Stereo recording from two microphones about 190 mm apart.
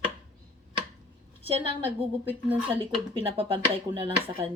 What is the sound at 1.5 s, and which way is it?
Speech, 25° right (ahead or behind).